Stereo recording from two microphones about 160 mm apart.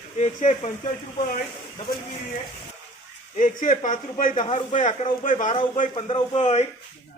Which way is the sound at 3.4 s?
55° left (ahead or behind).